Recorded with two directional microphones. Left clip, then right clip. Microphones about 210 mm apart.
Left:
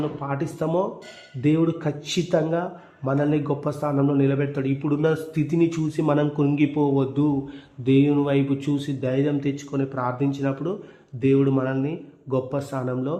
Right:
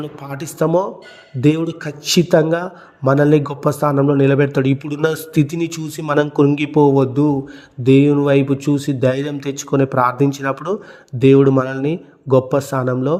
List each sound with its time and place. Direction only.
0.3 s a man's voice: 30° right (ahead or behind)